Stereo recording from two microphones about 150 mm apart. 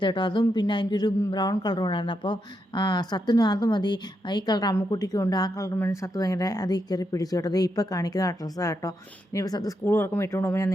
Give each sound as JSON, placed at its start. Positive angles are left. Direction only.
{"t": 0.0, "sound": "speech", "side_deg": 30}